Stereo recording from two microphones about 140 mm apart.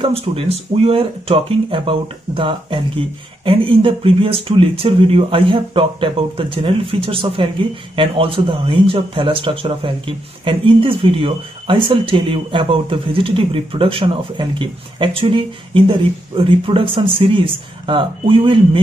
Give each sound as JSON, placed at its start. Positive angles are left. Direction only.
{"t": 0.0, "sound": "speech", "side_deg": -45}